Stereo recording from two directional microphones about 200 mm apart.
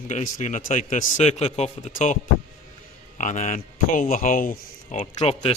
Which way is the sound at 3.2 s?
35° left (ahead or behind).